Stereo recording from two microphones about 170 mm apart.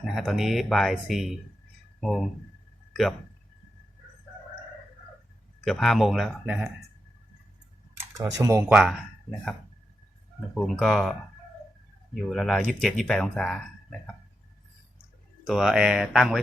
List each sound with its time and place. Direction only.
0.0 s speech: centre (ahead or behind)
5.6 s speech: centre (ahead or behind)
7.9 s speech: 15° right (ahead or behind)
8.7 s speech: centre (ahead or behind)
10.5 s speech: centre (ahead or behind)
12.1 s speech: 5° left (ahead or behind)
15.4 s speech: 5° right (ahead or behind)